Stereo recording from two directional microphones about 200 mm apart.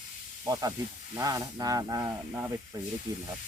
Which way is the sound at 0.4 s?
15° right (ahead or behind).